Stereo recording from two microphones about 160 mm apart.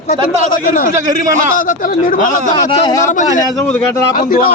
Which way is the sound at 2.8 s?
20° left (ahead or behind).